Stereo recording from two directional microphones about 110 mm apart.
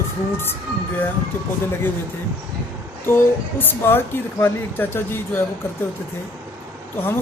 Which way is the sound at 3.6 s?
20° left (ahead or behind).